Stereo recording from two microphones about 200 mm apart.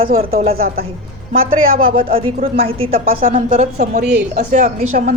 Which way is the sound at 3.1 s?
45° right (ahead or behind).